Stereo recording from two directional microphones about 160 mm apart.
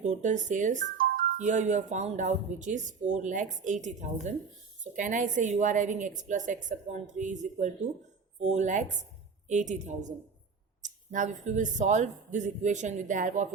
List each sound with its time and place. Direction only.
0.0 s speech: 50° right (ahead or behind)